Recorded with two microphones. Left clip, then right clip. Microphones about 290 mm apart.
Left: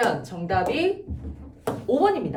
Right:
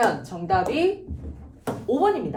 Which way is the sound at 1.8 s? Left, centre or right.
Centre.